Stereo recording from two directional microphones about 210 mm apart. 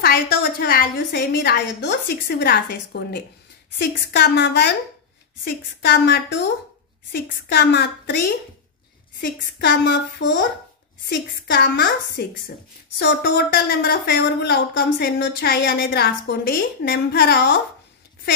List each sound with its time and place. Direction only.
0.0 s speech: 45° left (ahead or behind)
9.2 s speech: 50° left (ahead or behind)